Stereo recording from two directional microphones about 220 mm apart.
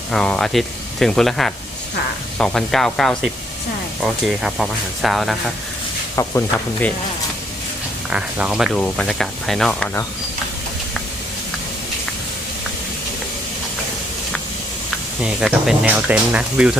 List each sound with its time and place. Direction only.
0.1 s speech: centre (ahead or behind)
6.2 s speech: 10° left (ahead or behind)
8.1 s speech: 5° right (ahead or behind)
15.2 s speech: 5° right (ahead or behind)